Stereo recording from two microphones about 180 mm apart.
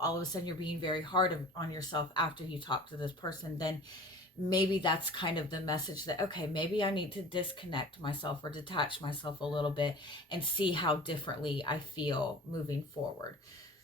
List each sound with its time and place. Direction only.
0.0 s speech: 25° left (ahead or behind)